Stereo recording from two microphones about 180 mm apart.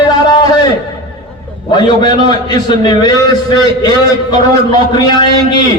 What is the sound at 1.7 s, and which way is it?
A man's voice, 25° left (ahead or behind).